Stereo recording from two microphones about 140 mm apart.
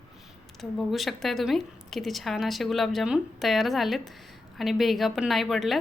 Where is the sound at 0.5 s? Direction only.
Centre (ahead or behind).